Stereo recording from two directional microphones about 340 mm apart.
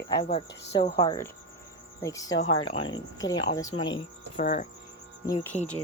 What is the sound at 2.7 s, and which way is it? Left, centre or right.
Speech, centre.